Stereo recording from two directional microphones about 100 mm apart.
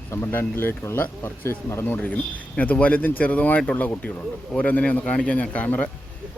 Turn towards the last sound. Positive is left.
turn(degrees=15)  # may be behind; listen again after turning